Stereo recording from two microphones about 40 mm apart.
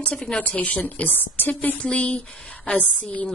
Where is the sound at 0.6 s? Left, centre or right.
Left.